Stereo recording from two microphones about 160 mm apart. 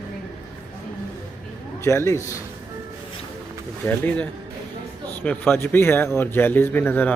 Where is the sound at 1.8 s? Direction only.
15° left (ahead or behind).